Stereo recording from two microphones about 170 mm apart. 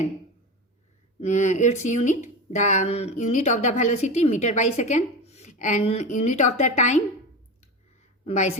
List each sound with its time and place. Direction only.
1.2 s speech: 45° left (ahead or behind)
8.2 s speech: 45° left (ahead or behind)